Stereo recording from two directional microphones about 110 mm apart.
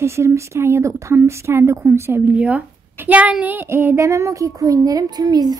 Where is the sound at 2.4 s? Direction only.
10° right (ahead or behind).